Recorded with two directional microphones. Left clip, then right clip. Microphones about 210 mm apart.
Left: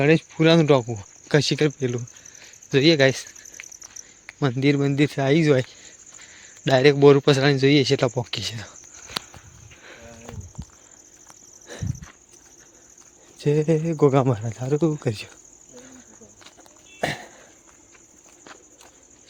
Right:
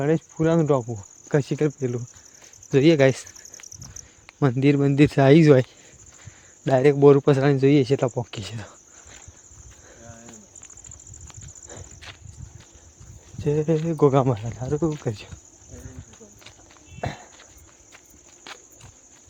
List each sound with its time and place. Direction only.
0.0 s speech: 20° left (ahead or behind); by 2.5 s 5° left (ahead or behind)
2.6 s cricket: 10° right (ahead or behind)
4.3 s a man's voice: 10° right (ahead or behind)
6.7 s a man's voice: centre (ahead or behind)
13.4 s speech: 10° left (ahead or behind)
17.0 s a sound: 25° left (ahead or behind)